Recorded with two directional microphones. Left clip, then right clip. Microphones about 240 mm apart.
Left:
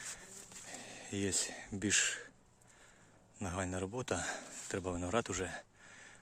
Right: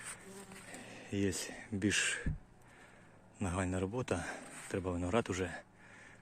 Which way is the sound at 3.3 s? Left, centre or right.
Centre.